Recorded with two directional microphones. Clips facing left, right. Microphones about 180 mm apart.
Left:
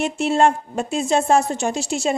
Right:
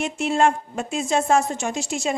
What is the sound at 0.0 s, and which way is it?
A woman's voice, 35° left (ahead or behind).